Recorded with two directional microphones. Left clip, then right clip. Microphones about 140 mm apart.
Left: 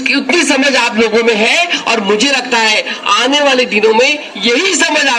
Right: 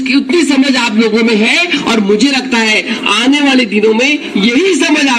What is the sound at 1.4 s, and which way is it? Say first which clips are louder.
Speech: even; 20° right (ahead or behind).